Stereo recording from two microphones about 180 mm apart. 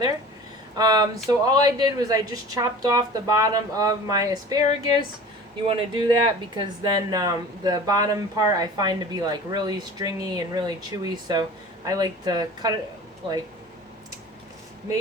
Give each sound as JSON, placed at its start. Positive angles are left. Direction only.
{"t": 0.8, "sound": "speech", "side_deg": -20}
{"t": 5.6, "sound": "speech", "side_deg": -30}